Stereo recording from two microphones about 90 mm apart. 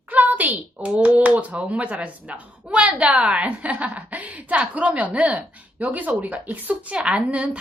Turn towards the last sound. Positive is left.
turn(degrees=-15)  # may be behind; listen again after turning